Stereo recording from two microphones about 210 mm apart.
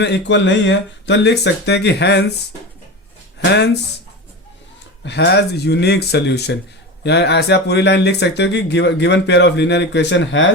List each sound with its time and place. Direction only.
0.0 s speech: 55° left (ahead or behind)
3.4 s speech: 55° left (ahead or behind)
5.0 s speech: 55° left (ahead or behind)